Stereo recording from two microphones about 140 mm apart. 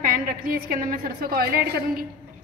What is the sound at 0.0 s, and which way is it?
A woman's voice, 80° right.